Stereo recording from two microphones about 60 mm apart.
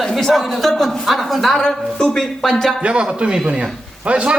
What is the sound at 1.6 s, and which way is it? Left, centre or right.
A woman's voice, centre.